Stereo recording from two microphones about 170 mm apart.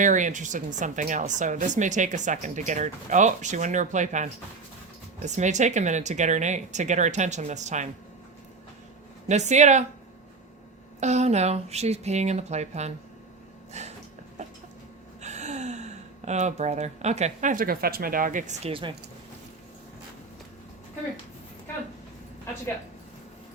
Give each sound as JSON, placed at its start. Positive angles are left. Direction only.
{"t": 0.0, "sound": "speech", "side_deg": -45}
{"t": 9.3, "sound": "speech", "side_deg": -45}
{"t": 11.0, "sound": "speech", "side_deg": -40}
{"t": 15.2, "sound": "speech", "side_deg": -45}
{"t": 18.7, "sound": "speech", "side_deg": -30}